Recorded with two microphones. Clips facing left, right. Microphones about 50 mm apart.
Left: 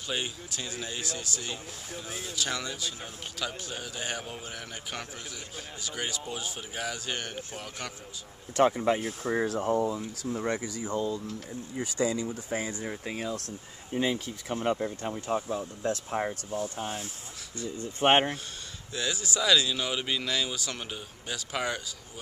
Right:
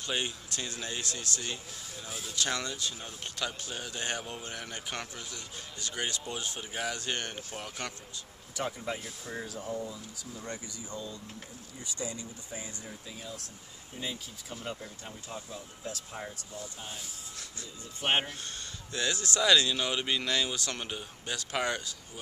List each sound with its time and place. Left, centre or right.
0.0 s speech: centre
2.0 s speech: left
2.3 s speech: centre
8.5 s speech: left
10.5 s speech: left
11.7 s speech: left
12.8 s speech: left
18.0 s speech: left
18.9 s speech: centre